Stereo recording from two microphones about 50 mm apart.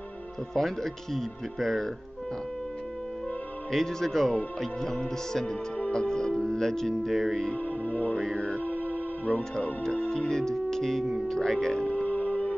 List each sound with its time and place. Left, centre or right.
0.6 s speech: centre
3.7 s speech: centre
7.5 s speech: left
8.4 s music: left
9.9 s speech: centre
11.8 s music: left